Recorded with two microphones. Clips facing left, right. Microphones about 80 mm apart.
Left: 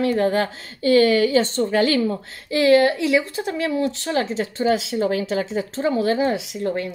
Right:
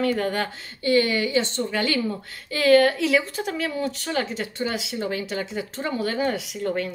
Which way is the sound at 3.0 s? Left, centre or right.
Centre.